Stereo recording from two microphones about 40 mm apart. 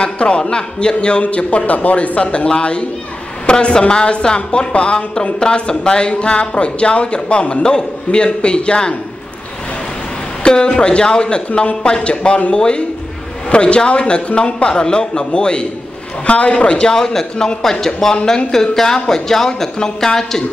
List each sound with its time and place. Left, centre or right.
0.0 s a sound: left
0.4 s a woman's voice: left
10.4 s a woman's voice: left
16.9 s speech: centre